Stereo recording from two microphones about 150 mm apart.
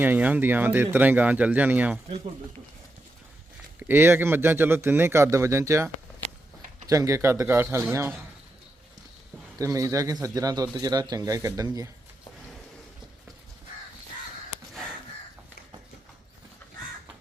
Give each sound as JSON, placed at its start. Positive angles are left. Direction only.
{"t": 0.0, "sound": "speech", "side_deg": -10}
{"t": 3.8, "sound": "speech", "side_deg": -15}
{"t": 9.6, "sound": "a man's voice", "side_deg": -20}